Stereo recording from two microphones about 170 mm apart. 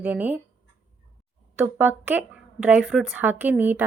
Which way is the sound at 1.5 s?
10° right (ahead or behind).